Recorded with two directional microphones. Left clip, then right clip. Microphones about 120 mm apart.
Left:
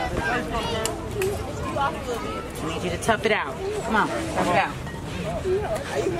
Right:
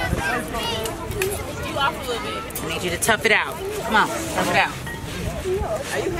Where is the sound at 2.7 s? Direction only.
20° right (ahead or behind).